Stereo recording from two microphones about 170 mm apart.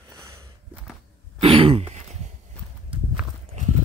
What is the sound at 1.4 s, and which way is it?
Throat clearing, 35° right (ahead or behind).